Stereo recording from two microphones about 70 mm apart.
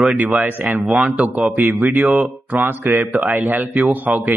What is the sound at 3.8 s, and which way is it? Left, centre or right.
Speech, centre.